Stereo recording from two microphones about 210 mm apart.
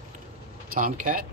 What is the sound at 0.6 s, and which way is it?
Speech, 40° right (ahead or behind).